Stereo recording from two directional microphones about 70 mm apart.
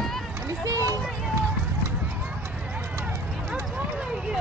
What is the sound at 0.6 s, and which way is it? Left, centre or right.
Run, right.